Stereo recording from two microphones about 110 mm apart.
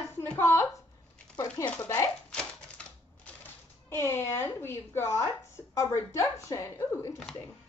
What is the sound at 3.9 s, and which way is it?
Speech, 25° left (ahead or behind).